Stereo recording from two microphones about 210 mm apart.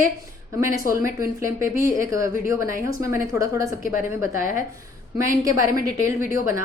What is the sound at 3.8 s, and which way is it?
Speech, 40° left (ahead or behind).